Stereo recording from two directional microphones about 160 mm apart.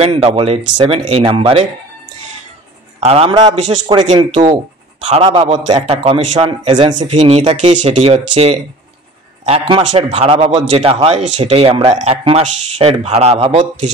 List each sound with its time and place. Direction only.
0.0 s speech: 40° right (ahead or behind)
3.0 s a man's voice: 40° right (ahead or behind)
6.3 s speech: 40° right (ahead or behind)